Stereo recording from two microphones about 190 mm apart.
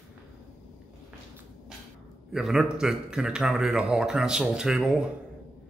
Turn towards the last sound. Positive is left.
turn(degrees=-5)  # may be behind; listen again after turning